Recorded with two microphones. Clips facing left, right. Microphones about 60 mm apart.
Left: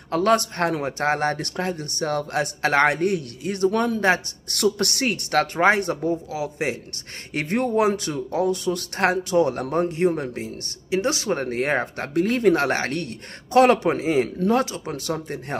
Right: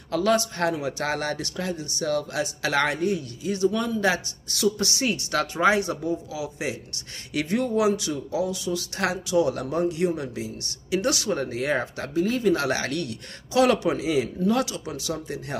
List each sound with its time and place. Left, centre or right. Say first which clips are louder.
0.1 s speech: left 3 dB; left
10.9 s speech: left 2 dB; left
12.1 s speech: left 4 dB; left